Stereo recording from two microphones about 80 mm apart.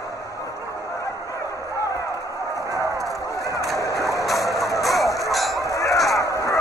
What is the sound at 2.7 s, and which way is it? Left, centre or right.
Run, right.